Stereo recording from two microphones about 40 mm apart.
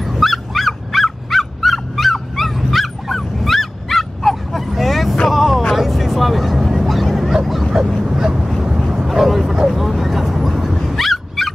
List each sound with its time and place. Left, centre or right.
0.0 s fowl: centre
5.3 s vehicle: centre
6.9 s dog: centre
8.1 s vehicle: centre
10.4 s fowl: centre